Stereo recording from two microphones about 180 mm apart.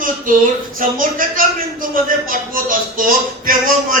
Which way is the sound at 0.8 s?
50° right (ahead or behind).